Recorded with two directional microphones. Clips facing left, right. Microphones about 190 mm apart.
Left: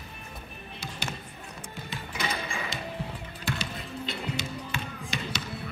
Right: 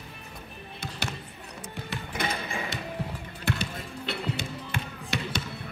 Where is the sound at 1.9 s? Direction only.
55° right (ahead or behind).